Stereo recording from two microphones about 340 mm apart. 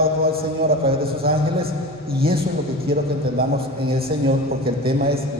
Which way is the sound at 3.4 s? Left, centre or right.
Right.